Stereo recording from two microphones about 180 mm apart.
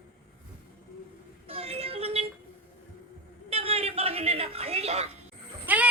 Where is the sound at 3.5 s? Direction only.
35° right (ahead or behind).